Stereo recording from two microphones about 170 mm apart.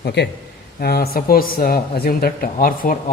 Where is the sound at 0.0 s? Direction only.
85° left.